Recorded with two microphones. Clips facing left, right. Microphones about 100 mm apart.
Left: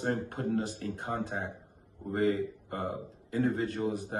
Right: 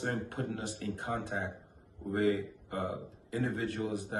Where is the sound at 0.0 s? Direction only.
35° left (ahead or behind).